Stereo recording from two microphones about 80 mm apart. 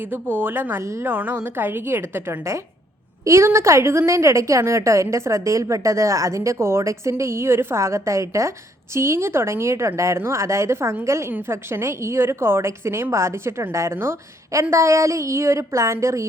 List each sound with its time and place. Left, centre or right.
0.0 s a woman's voice: right
1.1 s a woman's voice: right